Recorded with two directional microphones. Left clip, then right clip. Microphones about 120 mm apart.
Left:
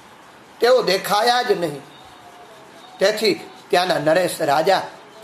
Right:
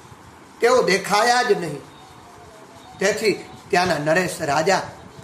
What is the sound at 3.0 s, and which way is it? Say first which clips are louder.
Speech: left 2 dB; 15° left (ahead or behind).